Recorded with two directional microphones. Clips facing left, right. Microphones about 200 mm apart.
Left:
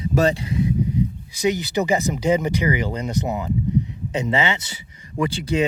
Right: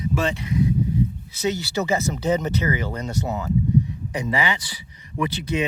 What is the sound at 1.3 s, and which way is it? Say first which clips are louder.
Speech: left 3 dB; 15° left (ahead or behind).